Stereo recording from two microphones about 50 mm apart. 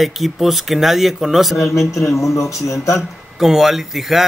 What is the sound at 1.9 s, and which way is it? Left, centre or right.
A man's voice, left.